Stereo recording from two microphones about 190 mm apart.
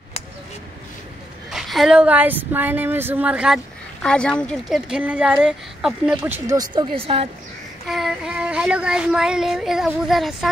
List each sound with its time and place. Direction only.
1.5 s a woman's voice: centre (ahead or behind); by 7.2 s 30° right (ahead or behind)
7.8 s speech: centre (ahead or behind)